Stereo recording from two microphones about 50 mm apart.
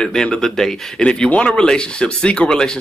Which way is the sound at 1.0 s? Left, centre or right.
Left.